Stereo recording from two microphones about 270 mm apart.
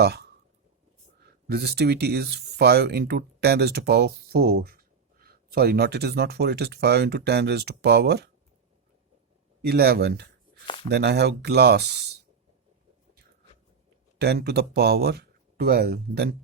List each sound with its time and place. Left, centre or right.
0.0 s speech: right
1.5 s speech: right
9.6 s speech: right
14.2 s speech: right